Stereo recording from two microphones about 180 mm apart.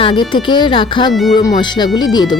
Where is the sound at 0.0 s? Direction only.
30° left (ahead or behind).